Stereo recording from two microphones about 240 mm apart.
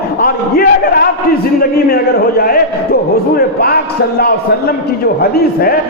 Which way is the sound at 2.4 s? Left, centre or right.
Left.